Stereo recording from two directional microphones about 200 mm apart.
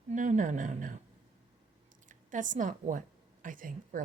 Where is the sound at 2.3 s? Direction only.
40° right (ahead or behind).